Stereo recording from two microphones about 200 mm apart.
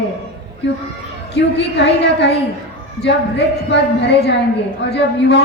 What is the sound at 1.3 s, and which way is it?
A woman's voice, 60° left (ahead or behind).